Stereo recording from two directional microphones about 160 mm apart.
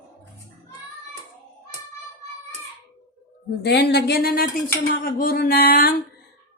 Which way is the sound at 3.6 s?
90° left.